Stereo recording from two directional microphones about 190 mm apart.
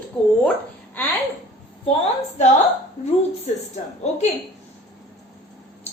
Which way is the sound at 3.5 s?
35° left (ahead or behind).